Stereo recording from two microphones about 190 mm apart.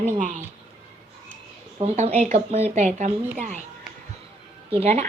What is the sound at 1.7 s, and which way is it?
A woman's voice, 35° right (ahead or behind).